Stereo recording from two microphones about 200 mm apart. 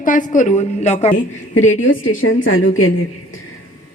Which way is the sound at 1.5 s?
75° left (ahead or behind).